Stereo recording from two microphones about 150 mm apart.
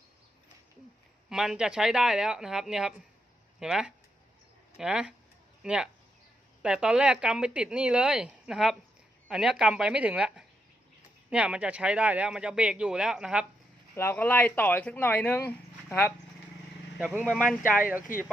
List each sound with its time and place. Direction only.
1.3 s speech: 5° right (ahead or behind)
13.9 s speech: 15° left (ahead or behind)
17.1 s speech: 10° right (ahead or behind)
18.1 s speech: 65° left (ahead or behind)